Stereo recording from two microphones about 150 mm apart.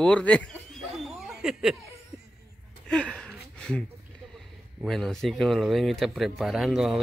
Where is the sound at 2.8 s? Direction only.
5° left (ahead or behind).